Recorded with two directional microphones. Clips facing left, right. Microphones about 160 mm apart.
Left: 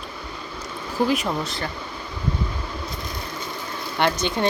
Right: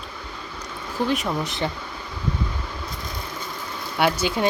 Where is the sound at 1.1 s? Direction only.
5° left (ahead or behind).